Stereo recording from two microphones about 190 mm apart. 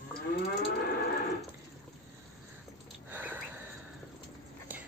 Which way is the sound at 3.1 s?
10° right (ahead or behind).